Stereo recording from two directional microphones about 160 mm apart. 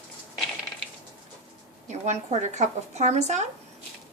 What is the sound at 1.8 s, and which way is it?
Speech, 45° right (ahead or behind).